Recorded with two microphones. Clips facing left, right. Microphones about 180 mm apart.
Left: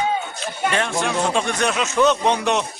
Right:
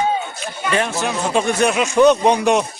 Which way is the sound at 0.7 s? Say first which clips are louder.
Right 4 dB; 5° right (ahead or behind).